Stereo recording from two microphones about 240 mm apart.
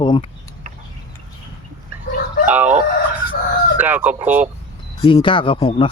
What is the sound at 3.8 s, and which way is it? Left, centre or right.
Speech, centre.